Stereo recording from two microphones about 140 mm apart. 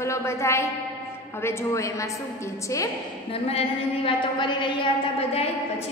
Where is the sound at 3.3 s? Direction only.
45° left (ahead or behind).